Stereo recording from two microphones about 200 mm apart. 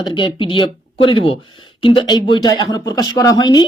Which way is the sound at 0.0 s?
25° left (ahead or behind).